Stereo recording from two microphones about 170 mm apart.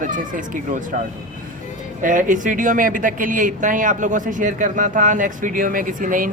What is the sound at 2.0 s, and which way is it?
Speech, 50° right (ahead or behind).